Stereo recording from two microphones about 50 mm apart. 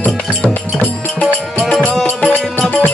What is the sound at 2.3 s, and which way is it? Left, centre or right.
Music, left.